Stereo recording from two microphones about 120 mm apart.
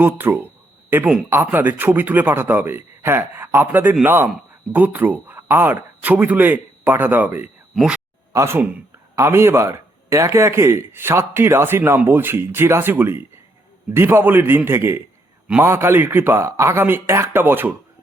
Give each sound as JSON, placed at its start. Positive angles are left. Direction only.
{"t": 0.0, "sound": "speech", "side_deg": -15}
{"t": 8.3, "sound": "a man's voice", "side_deg": -20}